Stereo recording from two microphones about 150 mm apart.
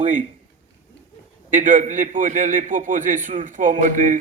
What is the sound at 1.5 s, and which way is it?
A man's voice, 60° right (ahead or behind).